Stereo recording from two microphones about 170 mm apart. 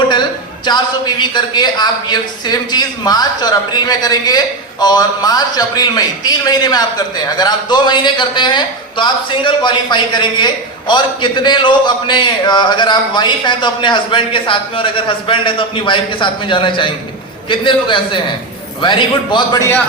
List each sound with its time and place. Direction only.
0.1 s a man's voice: 25° left (ahead or behind)